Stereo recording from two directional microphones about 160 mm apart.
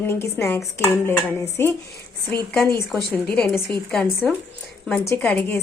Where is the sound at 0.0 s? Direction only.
15° left (ahead or behind).